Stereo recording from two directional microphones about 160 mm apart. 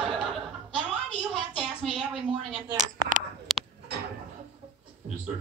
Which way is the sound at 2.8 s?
55° right (ahead or behind).